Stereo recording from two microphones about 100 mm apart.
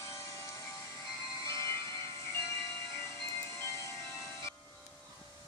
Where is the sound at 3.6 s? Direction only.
30° left (ahead or behind).